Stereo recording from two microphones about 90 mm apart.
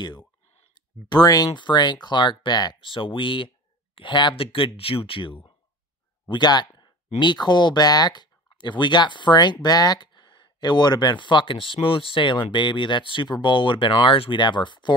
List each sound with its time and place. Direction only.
1.0 s speech: 50° left (ahead or behind)
2.8 s speech: 70° left (ahead or behind)
6.2 s speech: 55° left (ahead or behind)